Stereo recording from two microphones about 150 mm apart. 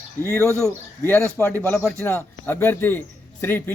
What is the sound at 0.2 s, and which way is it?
Speech, 15° left (ahead or behind).